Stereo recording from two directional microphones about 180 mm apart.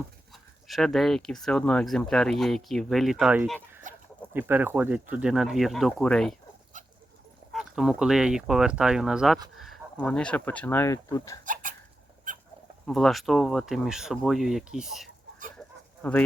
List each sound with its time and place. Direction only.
0.7 s speech: centre (ahead or behind)
7.5 s speech: centre (ahead or behind); by 11.3 s 20° left (ahead or behind)
11.4 s chicken: 45° right (ahead or behind)
12.3 s rodents: 45° right (ahead or behind)
12.8 s speech: centre (ahead or behind)